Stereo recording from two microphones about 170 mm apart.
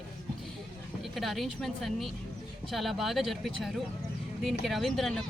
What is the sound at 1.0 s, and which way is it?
A woman's voice, centre (ahead or behind).